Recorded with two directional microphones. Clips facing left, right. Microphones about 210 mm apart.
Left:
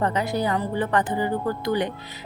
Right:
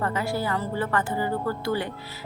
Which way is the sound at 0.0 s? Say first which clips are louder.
Left 3 dB; 20° left (ahead or behind).